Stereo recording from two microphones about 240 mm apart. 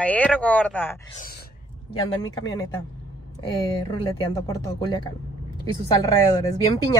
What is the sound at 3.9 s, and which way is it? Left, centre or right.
A woman's voice, centre.